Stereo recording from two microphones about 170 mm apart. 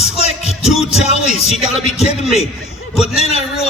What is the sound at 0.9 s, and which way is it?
A man's voice, 40° left (ahead or behind).